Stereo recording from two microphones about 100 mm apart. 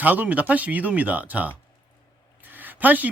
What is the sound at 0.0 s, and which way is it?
Speech, 15° right (ahead or behind).